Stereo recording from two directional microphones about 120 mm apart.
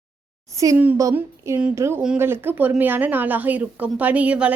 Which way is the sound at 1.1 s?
15° right (ahead or behind).